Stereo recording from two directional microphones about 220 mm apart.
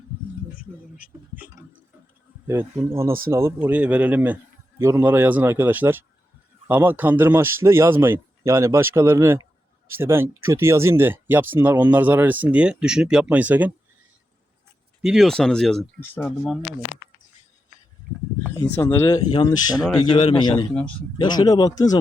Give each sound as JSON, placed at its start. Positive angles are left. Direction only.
{"t": 2.5, "sound": "speech", "side_deg": -10}
{"t": 15.0, "sound": "speech", "side_deg": 0}
{"t": 18.7, "sound": "speech", "side_deg": 10}